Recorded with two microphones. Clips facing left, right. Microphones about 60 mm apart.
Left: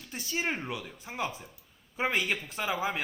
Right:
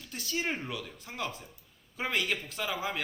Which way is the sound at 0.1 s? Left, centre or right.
Left.